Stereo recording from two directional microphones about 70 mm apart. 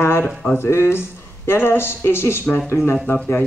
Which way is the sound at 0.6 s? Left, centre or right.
Left.